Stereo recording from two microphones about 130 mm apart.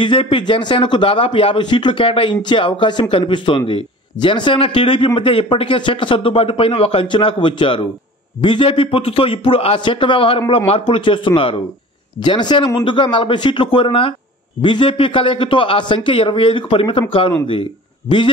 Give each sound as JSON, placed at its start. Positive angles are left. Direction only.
{"t": 0.0, "sound": "a man's voice", "side_deg": 40}